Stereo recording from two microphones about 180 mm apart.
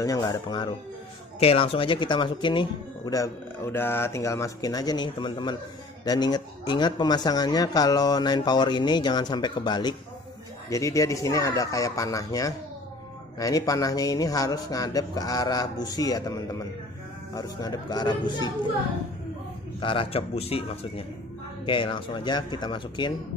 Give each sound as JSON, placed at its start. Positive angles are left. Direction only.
{"t": 0.0, "sound": "speech", "side_deg": 20}
{"t": 19.8, "sound": "speech", "side_deg": 30}